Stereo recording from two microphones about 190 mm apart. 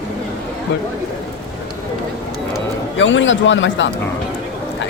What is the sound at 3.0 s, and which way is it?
Speech, 80° left.